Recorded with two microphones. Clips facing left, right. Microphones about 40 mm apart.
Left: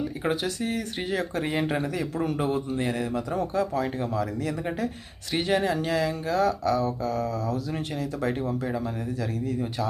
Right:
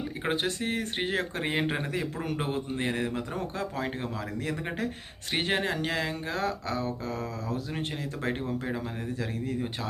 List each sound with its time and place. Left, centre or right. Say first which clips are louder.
0.0 s a man's voice: left 2 dB; right
8.6 s speech: left 4 dB; right